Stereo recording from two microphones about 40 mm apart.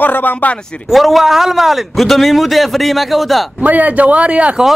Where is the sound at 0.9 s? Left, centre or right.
Centre.